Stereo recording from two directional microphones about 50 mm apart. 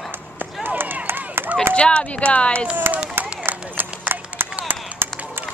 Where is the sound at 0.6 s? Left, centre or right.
Right.